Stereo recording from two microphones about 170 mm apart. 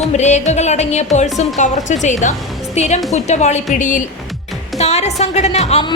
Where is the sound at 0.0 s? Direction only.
45° left (ahead or behind).